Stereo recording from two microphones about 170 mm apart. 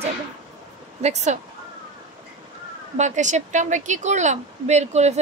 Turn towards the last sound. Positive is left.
turn(degrees=-40)  # may be behind; listen again after turning